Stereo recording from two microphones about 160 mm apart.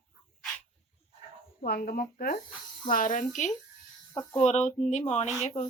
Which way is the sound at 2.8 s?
60° left (ahead or behind).